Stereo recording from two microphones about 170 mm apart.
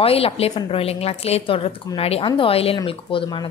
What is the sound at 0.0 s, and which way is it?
A woman's voice, 35° left (ahead or behind).